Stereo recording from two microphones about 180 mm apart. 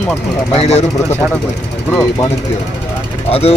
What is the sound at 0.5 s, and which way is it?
Speech, 35° left (ahead or behind).